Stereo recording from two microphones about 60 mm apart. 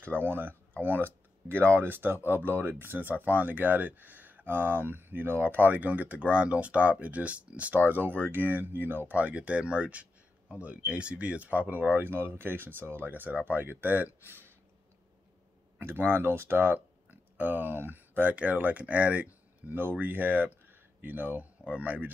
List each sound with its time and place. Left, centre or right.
0.0 s speech: right
15.8 s speech: right